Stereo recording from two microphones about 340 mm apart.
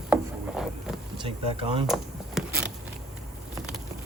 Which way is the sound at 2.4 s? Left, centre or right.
Centre.